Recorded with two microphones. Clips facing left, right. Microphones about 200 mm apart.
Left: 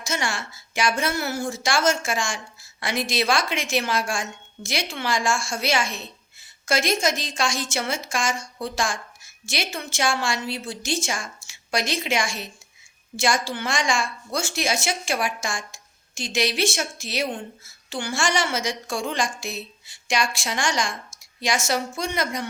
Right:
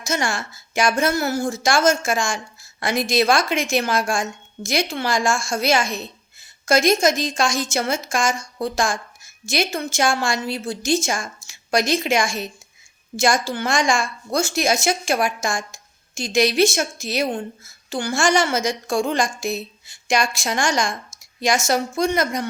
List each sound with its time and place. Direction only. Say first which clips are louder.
0.0 s a woman's voice: right 4 dB; 45° right (ahead or behind)